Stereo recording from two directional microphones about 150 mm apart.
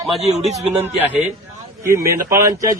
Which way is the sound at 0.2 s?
45° right (ahead or behind).